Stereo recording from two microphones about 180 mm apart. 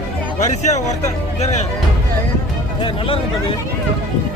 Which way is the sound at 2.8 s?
30° left (ahead or behind).